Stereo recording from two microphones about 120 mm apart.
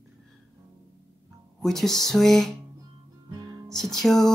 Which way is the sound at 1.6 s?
5° left (ahead or behind).